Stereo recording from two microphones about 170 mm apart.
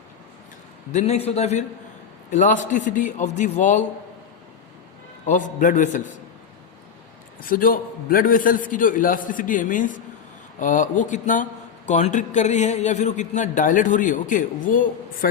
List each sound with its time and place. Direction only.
0.9 s a man's voice: 40° left (ahead or behind)
5.2 s speech: 50° left (ahead or behind)
7.4 s speech: 55° left (ahead or behind)